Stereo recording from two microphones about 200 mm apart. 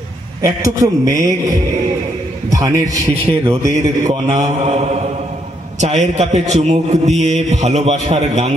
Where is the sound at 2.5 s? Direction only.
15° right (ahead or behind).